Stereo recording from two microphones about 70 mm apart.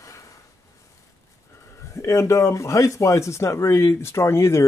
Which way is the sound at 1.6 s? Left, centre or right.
Left.